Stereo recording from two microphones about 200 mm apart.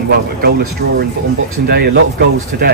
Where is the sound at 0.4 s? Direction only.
50° right (ahead or behind).